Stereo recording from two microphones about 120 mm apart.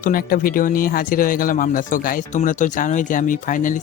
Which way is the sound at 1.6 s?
90° left.